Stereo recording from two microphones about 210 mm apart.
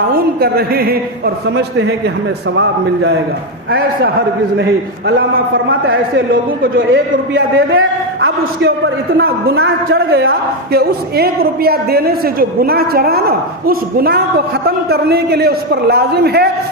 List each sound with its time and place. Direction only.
0.1 s a man's voice: 45° right (ahead or behind)
3.7 s a man's voice: 45° right (ahead or behind)
6.9 s a man's voice: 70° right (ahead or behind); by 16.5 s 50° right (ahead or behind)